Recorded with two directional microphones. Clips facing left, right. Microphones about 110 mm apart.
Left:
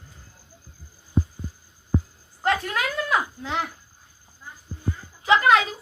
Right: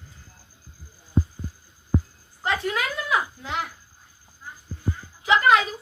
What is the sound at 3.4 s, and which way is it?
Speech, 30° left (ahead or behind).